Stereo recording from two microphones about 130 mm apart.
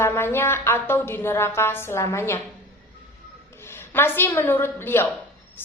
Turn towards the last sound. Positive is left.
turn(degrees=20)  # may be behind; listen again after turning